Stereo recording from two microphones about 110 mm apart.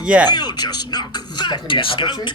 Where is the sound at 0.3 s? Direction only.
40° left (ahead or behind).